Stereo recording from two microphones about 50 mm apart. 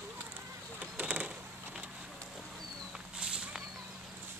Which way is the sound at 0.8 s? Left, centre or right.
Right.